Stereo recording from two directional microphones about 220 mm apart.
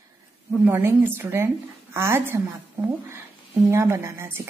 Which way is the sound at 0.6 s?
10° right (ahead or behind).